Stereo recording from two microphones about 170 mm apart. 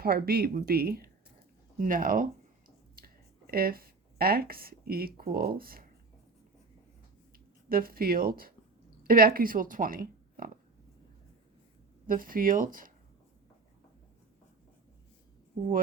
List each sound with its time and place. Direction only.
0.0 s speech: 60° right (ahead or behind)
3.0 s a sound: 60° right (ahead or behind)
3.4 s speech: 60° right (ahead or behind)
7.7 s speech: 60° right (ahead or behind)
12.0 s speech: 55° right (ahead or behind)